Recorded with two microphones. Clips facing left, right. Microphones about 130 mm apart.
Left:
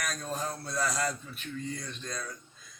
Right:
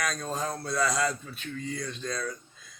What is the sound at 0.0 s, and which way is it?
Speech, 85° right.